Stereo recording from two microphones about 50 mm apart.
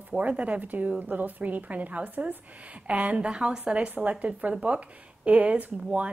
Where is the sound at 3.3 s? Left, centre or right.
Centre.